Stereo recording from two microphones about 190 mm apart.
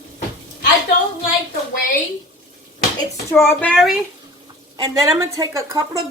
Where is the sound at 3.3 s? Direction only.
10° left (ahead or behind).